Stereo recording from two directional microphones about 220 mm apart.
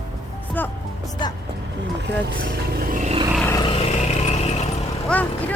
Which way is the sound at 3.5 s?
20° left (ahead or behind).